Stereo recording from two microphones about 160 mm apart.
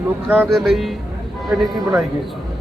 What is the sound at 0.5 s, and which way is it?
Speech, centre (ahead or behind).